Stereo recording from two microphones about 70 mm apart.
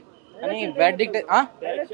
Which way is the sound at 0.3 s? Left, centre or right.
Right.